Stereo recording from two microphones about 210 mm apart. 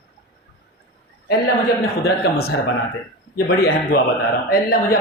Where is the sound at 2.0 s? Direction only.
50° left (ahead or behind).